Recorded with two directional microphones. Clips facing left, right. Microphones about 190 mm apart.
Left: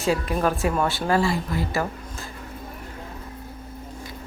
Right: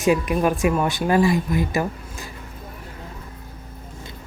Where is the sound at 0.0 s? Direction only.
15° right (ahead or behind).